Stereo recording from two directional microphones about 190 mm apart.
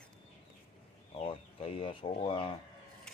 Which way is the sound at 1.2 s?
30° left (ahead or behind).